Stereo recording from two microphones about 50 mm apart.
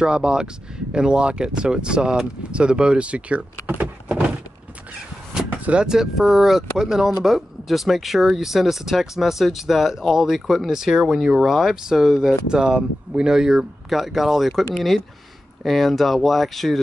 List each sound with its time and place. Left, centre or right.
0.0 s speech: centre
3.8 s a sound: right
5.5 s vehicle: right
5.9 s speech: centre
15.6 s speech: centre